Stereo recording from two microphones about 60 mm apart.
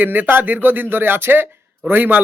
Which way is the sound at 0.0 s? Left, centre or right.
Right.